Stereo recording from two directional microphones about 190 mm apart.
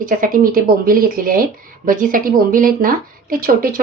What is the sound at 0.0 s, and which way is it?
Speech, 45° right (ahead or behind).